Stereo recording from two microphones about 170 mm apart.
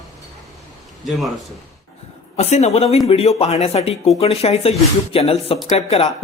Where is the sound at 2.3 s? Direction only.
40° left (ahead or behind).